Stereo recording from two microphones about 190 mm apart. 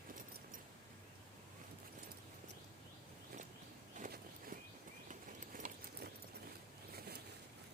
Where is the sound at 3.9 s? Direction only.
45° right (ahead or behind).